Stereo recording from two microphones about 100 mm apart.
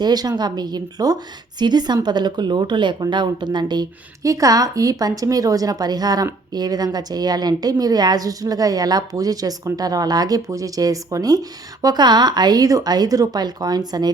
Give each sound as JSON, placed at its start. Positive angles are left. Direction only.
{"t": 0.0, "sound": "a woman's voice", "side_deg": -40}